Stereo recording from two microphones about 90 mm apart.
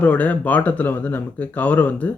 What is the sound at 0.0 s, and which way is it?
Speech, 15° left (ahead or behind).